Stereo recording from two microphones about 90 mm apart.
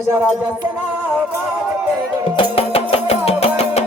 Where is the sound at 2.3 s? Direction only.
90° left.